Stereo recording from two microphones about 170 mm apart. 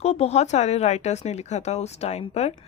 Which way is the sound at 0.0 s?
40° left (ahead or behind).